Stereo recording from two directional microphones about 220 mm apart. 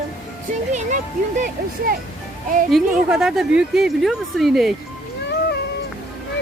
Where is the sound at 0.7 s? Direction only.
35° right (ahead or behind).